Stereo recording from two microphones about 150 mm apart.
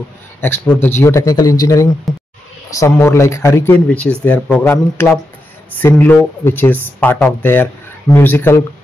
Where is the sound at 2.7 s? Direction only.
20° left (ahead or behind).